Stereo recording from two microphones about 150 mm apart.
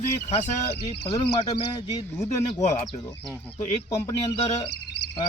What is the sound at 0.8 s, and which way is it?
Speech, 35° left (ahead or behind).